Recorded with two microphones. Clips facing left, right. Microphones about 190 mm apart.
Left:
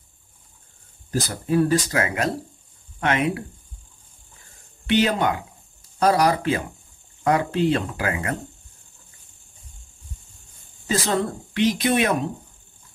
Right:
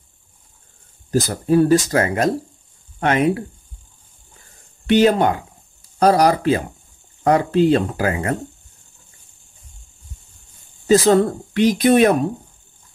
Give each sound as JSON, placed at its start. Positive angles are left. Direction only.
{"t": 1.2, "sound": "speech", "side_deg": -40}
{"t": 4.8, "sound": "speech", "side_deg": -45}
{"t": 10.9, "sound": "speech", "side_deg": -40}